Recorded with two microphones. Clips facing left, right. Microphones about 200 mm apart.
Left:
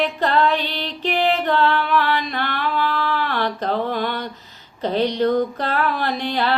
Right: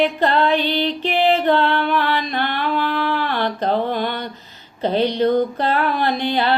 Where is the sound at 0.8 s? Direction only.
Centre (ahead or behind).